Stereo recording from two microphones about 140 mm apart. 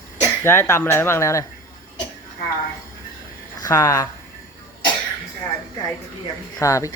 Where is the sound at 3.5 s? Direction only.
25° left (ahead or behind).